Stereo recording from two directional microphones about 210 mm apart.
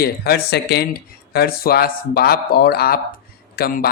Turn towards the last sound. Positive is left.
turn(degrees=45)  # may be behind; listen again after turning